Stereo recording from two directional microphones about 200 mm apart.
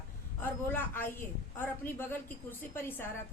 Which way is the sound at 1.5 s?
10° left (ahead or behind).